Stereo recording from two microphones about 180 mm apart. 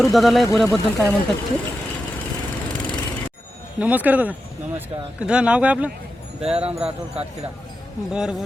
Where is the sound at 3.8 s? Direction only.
10° right (ahead or behind).